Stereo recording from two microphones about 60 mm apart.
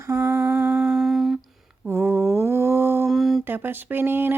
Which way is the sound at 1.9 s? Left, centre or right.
Right.